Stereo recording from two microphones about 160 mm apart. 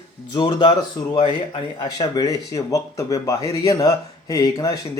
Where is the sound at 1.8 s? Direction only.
25° left (ahead or behind).